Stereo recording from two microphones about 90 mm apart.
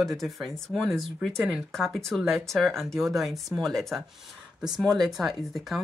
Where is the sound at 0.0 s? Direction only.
Centre (ahead or behind).